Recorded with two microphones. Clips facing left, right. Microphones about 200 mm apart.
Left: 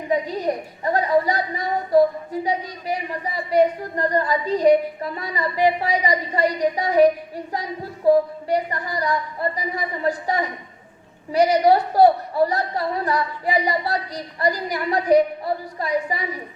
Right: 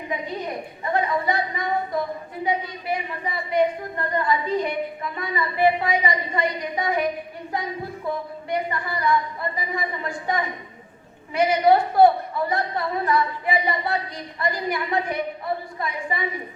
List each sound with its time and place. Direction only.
0.1 s a woman's voice: 35° left (ahead or behind)